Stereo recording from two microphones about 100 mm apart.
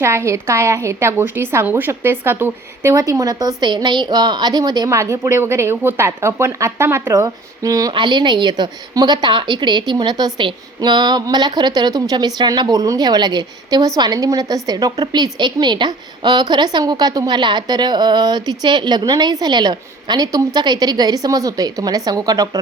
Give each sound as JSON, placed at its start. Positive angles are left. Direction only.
{"t": 0.0, "sound": "a woman's voice", "side_deg": -25}
{"t": 2.9, "sound": "a woman's voice", "side_deg": -35}
{"t": 4.9, "sound": "a woman's voice", "side_deg": -30}
{"t": 7.9, "sound": "a woman's voice", "side_deg": -50}